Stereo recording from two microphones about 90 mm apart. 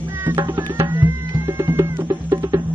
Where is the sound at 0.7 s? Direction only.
30° right (ahead or behind).